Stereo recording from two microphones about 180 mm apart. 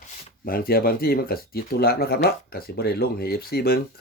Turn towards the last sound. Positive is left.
turn(degrees=55)  # may be behind; listen again after turning